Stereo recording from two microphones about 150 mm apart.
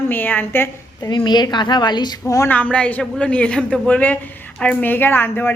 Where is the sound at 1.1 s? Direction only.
30° left (ahead or behind).